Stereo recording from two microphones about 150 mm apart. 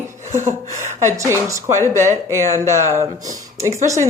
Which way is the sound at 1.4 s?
20° right (ahead or behind).